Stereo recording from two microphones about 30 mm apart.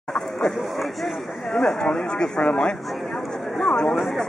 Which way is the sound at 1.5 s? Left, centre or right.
Centre.